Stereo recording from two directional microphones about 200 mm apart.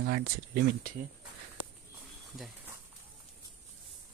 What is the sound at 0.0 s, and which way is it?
Speech, 55° right (ahead or behind).